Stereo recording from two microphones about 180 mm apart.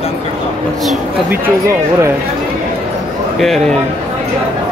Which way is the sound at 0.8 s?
10° right (ahead or behind).